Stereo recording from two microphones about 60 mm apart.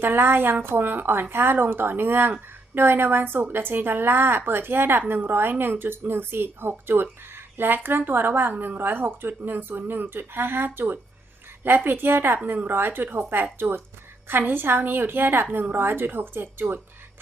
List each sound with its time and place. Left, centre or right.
0.0 s a woman's voice: right